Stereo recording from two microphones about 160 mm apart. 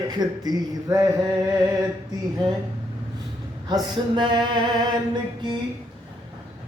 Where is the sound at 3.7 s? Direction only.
30° right (ahead or behind).